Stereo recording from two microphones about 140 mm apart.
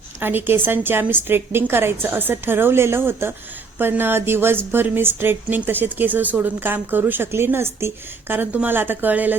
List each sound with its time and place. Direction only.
0.2 s speech: 15° right (ahead or behind)